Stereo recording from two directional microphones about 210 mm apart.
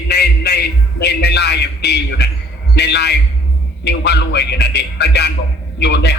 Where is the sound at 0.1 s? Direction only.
50° left (ahead or behind).